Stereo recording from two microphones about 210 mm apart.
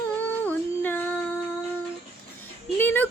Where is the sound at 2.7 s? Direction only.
10° left (ahead or behind).